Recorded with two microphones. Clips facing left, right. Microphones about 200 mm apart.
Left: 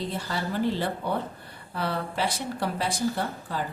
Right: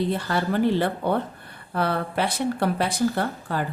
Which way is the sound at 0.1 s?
60° right (ahead or behind).